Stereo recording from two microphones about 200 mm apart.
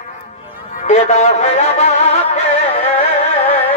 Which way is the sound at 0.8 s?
35° left (ahead or behind).